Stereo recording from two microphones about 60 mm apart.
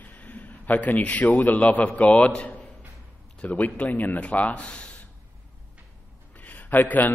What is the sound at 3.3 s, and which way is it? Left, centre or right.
Speech, left.